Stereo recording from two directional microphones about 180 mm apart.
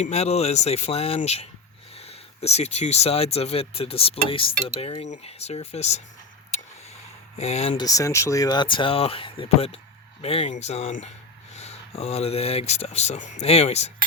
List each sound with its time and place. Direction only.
0.0 s speech: 35° left (ahead or behind)
7.3 s speech: 35° left (ahead or behind)